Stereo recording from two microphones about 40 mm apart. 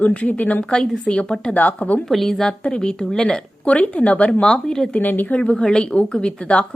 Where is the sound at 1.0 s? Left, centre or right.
Left.